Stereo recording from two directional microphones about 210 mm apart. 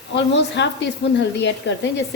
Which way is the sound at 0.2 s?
55° left (ahead or behind).